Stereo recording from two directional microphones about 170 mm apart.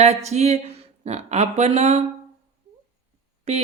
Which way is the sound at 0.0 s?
40° right (ahead or behind).